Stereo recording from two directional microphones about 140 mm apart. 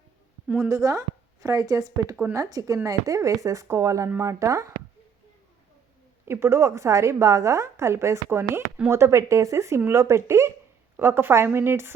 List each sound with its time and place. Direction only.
0.4 s a woman's voice: 5° right (ahead or behind)
0.7 s a woman's voice: 25° right (ahead or behind)
6.2 s a woman's voice: 15° right (ahead or behind)